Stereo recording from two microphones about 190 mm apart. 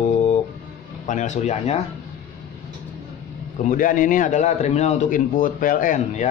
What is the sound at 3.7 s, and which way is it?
A man's voice, 45° left (ahead or behind).